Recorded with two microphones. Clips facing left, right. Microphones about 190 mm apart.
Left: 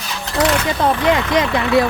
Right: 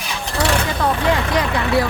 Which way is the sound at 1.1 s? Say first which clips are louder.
Left 3 dB; 20° left (ahead or behind).